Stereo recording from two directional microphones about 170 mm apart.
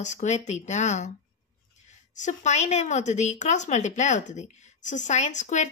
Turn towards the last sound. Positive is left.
turn(degrees=45)  # may be behind; listen again after turning